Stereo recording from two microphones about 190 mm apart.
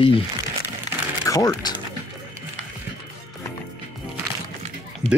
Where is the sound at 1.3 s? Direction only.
15° left (ahead or behind).